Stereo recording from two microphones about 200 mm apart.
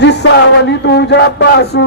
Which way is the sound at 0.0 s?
60° left (ahead or behind).